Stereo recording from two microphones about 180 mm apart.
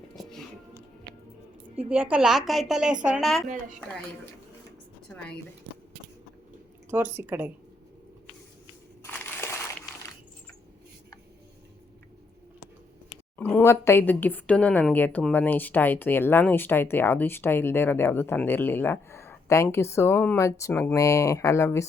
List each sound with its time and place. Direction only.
1.9 s a woman's voice: 10° right (ahead or behind)
6.9 s a woman's voice: 10° right (ahead or behind)
9.0 s crushing: 15° left (ahead or behind)
13.4 s a woman's voice: 10° left (ahead or behind)